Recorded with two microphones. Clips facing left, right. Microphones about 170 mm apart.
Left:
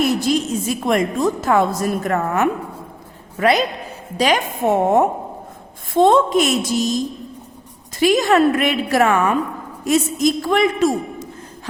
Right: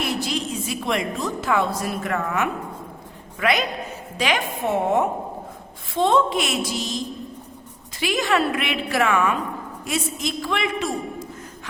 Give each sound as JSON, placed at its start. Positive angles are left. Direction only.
{"t": 0.0, "sound": "a woman's voice", "side_deg": 45}